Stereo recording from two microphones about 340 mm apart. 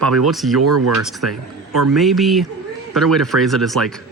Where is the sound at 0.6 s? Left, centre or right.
Right.